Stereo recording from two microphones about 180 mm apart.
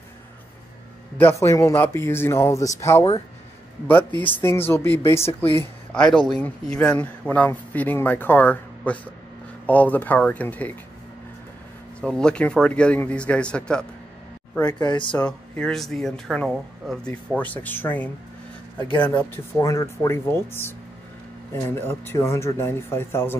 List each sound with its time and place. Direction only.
1.1 s speech: 15° left (ahead or behind)
5.6 s speech: 5° left (ahead or behind)
12.0 s speech: 5° left (ahead or behind)
14.7 s speech: 25° left (ahead or behind)
15.1 s speech: 5° left (ahead or behind)